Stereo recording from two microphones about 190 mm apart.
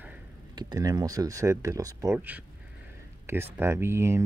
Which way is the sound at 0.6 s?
20° right (ahead or behind).